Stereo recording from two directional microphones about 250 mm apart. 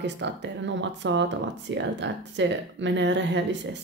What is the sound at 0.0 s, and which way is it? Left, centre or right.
Speech, right.